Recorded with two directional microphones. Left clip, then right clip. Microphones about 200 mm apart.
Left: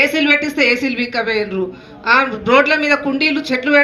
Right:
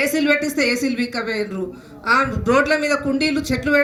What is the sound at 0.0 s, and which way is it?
A woman's voice, 60° right (ahead or behind).